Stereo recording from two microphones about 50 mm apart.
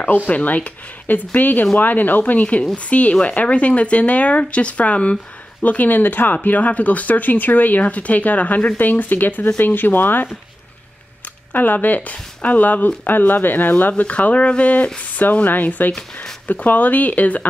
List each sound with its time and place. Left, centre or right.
0.3 s speech: left
11.5 s speech: left